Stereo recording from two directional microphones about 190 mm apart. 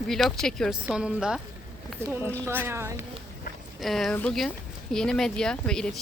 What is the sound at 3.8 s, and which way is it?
Speech, centre (ahead or behind).